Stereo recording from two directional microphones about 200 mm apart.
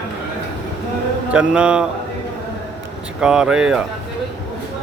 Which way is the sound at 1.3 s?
5° right (ahead or behind).